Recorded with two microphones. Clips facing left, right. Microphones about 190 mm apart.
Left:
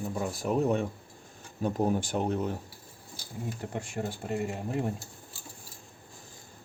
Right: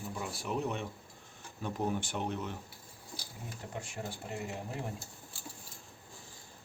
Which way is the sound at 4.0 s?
60° left (ahead or behind).